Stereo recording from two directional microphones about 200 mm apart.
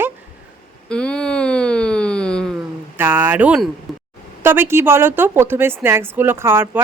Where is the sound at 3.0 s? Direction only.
10° right (ahead or behind).